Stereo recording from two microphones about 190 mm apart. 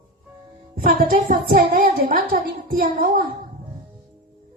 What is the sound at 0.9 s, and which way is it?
A woman's voice, 45° right (ahead or behind).